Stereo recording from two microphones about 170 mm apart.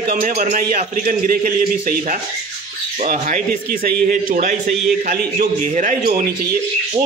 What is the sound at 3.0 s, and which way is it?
A man's voice, 50° right (ahead or behind).